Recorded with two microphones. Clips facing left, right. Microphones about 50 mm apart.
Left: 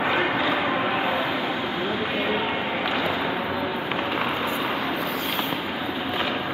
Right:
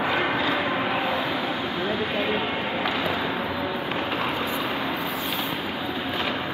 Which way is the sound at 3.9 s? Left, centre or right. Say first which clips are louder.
Left 1 dB; left.